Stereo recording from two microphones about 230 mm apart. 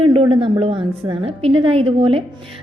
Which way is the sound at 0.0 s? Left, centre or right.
Right.